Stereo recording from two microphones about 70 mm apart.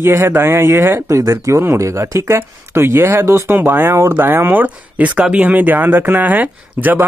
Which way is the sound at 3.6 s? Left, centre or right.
Right.